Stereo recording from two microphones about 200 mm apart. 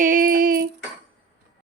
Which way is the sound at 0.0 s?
45° right (ahead or behind).